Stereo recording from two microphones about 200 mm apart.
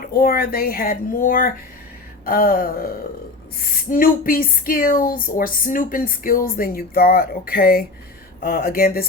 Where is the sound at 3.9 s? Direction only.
45° left (ahead or behind).